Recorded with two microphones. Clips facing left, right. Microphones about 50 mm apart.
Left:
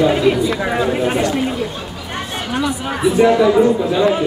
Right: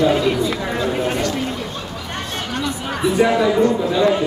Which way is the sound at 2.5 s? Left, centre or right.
Centre.